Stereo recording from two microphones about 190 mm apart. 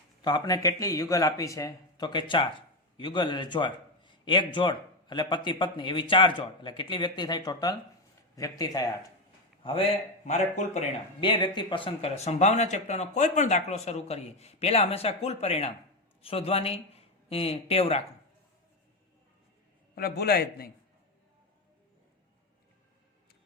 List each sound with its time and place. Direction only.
0.2 s speech: 20° left (ahead or behind)
9.6 s a man's voice: 30° left (ahead or behind)
20.0 s a man's voice: 55° left (ahead or behind)